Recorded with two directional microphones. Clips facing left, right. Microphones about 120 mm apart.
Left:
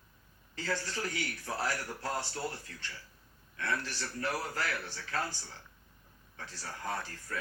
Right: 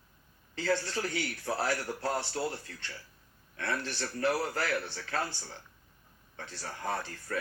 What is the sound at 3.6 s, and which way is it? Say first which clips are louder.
Speech: right 2 dB; 25° right (ahead or behind).